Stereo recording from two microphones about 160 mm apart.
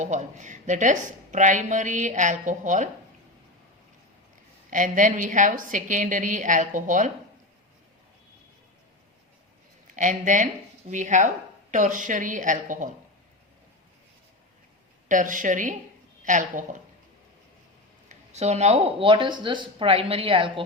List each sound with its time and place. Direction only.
0.0 s speech: 50° right (ahead or behind)
4.7 s speech: 55° right (ahead or behind)
9.8 s speech: 50° right (ahead or behind)
15.1 s a woman's voice: 55° right (ahead or behind)
18.1 s speech: 45° right (ahead or behind)